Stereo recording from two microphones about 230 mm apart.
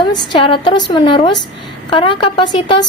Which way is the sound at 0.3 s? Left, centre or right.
Left.